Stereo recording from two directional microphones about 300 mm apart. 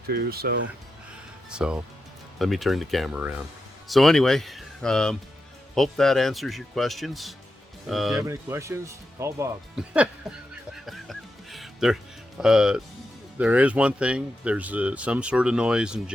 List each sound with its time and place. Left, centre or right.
0.1 s speech: right
1.5 s speech: centre
10.8 s music: centre
12.4 s speech: centre